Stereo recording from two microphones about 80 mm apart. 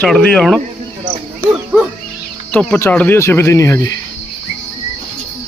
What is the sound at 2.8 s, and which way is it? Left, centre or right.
Speech, left.